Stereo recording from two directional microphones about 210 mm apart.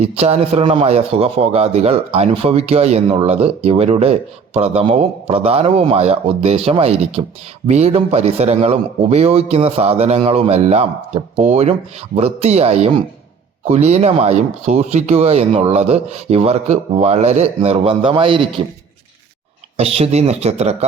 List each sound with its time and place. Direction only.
0.0 s speech: 30° right (ahead or behind)
19.7 s speech: 30° right (ahead or behind)